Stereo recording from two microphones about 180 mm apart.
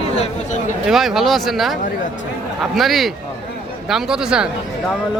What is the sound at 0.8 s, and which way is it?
Speech, centre (ahead or behind).